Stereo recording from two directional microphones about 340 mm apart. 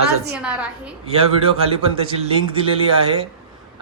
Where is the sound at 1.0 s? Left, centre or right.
Centre.